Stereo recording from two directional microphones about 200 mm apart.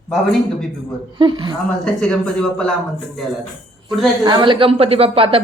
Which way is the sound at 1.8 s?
5° left (ahead or behind).